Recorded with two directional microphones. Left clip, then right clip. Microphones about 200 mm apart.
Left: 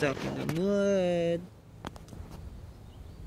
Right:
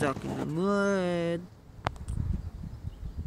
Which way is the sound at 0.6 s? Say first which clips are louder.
Left 1 dB; 25° right (ahead or behind).